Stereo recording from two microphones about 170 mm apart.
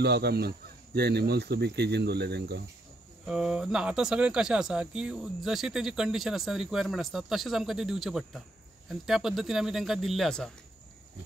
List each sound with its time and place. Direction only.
0.0 s speech: 70° right (ahead or behind)
3.3 s speech: 5° right (ahead or behind)